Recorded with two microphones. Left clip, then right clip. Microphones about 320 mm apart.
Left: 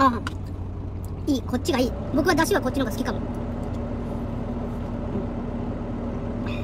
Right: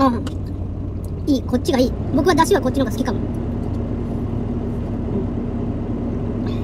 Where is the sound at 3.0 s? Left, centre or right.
Centre.